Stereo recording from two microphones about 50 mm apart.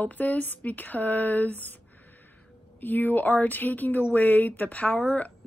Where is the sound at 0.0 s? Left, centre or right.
Left.